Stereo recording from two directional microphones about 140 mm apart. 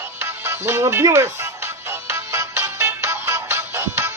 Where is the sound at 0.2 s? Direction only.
20° right (ahead or behind).